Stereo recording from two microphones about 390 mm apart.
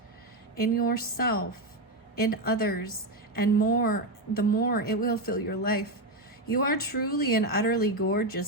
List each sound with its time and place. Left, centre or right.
0.5 s a woman's voice: left